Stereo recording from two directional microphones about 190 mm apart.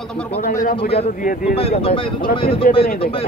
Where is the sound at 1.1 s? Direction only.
45° left (ahead or behind).